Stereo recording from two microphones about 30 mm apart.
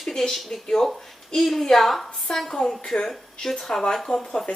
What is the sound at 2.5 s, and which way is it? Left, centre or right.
A woman's voice, centre.